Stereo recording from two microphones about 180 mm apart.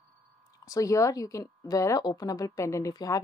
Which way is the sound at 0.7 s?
20° left (ahead or behind).